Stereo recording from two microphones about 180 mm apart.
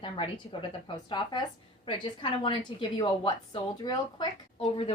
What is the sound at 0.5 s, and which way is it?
A woman's voice, 25° left (ahead or behind).